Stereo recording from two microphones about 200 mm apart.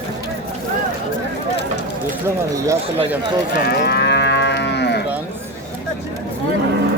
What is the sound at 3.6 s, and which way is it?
Moo, 55° left (ahead or behind).